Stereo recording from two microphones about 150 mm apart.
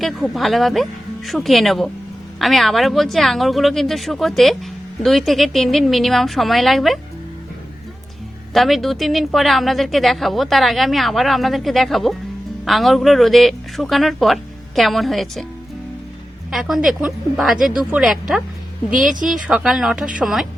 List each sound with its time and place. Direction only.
0.0 s a woman's voice: centre (ahead or behind)
8.5 s a woman's voice: centre (ahead or behind)
16.5 s a woman's voice: centre (ahead or behind)